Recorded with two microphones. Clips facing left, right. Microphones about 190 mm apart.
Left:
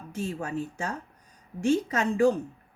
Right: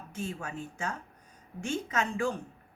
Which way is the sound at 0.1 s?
40° left (ahead or behind).